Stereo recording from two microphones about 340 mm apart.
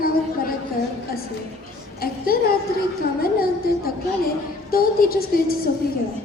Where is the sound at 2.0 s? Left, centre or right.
Left.